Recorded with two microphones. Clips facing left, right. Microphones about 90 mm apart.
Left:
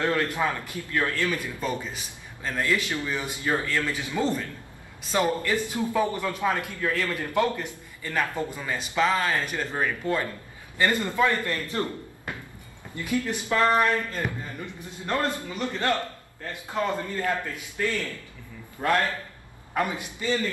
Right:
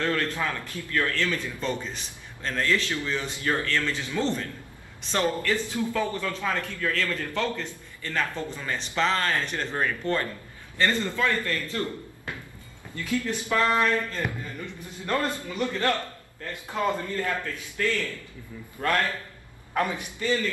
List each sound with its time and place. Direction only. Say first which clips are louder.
0.0 s a man's voice: left 2 dB; 20° left (ahead or behind)
17.1 s a man's voice: left 1 dB; 20° left (ahead or behind)